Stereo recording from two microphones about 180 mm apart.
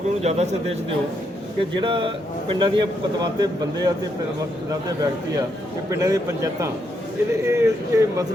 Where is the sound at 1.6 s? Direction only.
30° right (ahead or behind).